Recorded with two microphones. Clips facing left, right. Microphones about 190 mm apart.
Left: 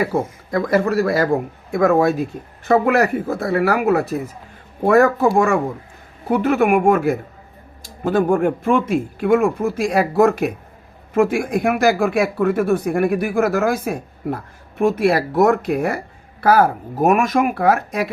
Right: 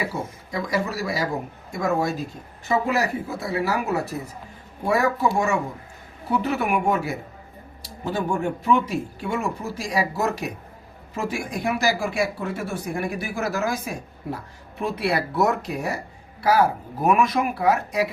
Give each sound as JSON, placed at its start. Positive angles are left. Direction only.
{"t": 0.0, "sound": "speech", "side_deg": 55}